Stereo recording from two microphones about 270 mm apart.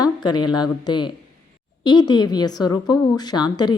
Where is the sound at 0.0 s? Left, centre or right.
Centre.